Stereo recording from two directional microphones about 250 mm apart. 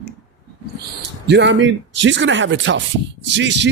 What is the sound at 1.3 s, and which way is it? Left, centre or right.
Speech, right.